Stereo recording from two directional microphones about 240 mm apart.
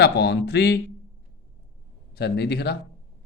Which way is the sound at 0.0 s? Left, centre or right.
Left.